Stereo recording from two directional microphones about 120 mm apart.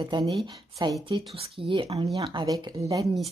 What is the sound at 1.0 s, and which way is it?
Speech, 50° right (ahead or behind).